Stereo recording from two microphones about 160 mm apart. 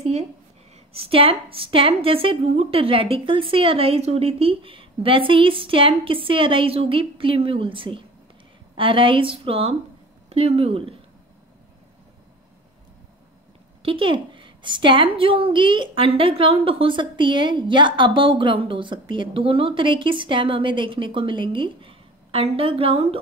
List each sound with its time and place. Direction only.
0.9 s a woman's voice: 35° right (ahead or behind)
13.8 s a woman's voice: 35° right (ahead or behind)